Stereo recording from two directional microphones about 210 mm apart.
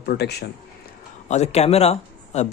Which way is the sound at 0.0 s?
50° left (ahead or behind).